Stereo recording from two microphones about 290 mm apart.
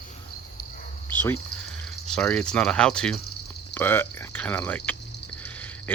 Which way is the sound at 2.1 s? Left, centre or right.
Centre.